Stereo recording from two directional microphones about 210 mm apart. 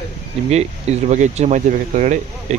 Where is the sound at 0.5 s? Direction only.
30° right (ahead or behind).